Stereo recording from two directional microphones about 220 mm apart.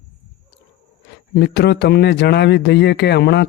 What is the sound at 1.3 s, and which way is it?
A man's voice, 50° left (ahead or behind).